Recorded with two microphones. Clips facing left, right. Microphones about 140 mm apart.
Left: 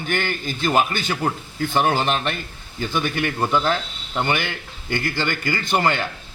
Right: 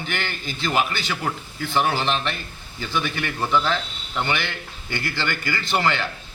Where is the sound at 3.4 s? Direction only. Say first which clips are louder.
Even; 15° left (ahead or behind).